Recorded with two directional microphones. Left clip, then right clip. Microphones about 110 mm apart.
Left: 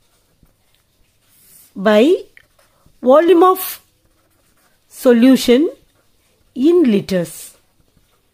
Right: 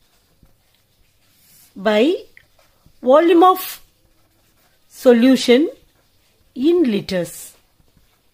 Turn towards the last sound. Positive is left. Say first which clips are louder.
# left 4 dB
turn(degrees=25)  # may be behind; listen again after turning